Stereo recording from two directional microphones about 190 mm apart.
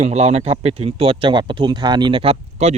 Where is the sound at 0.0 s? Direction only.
35° right (ahead or behind).